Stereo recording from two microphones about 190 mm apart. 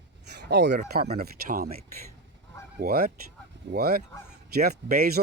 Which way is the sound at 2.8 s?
50° right (ahead or behind).